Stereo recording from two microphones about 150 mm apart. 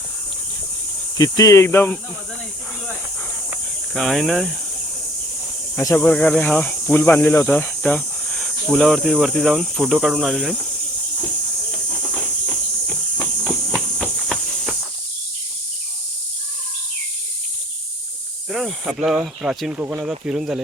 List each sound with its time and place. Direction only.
1.2 s speech: 25° left (ahead or behind)
3.9 s speech: centre (ahead or behind)
5.7 s speech: 15° left (ahead or behind); by 10.6 s centre (ahead or behind)
11.7 s insect: 5° left (ahead or behind)
18.5 s speech: centre (ahead or behind)